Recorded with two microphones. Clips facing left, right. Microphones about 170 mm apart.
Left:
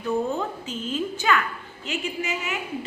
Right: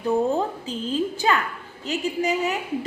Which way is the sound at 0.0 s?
35° right (ahead or behind).